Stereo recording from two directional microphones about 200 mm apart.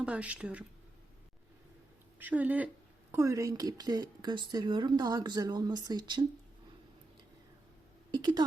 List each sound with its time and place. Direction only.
0.0 s speech: 5° right (ahead or behind)
2.1 s speech: 10° right (ahead or behind)
8.1 s speech: 20° right (ahead or behind)